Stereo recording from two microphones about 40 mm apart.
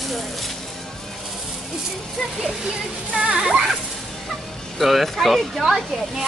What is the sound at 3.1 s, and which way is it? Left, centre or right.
Speech, right.